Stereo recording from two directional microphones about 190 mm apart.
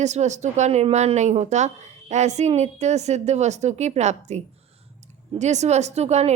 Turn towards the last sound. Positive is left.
turn(degrees=-35)  # may be behind; listen again after turning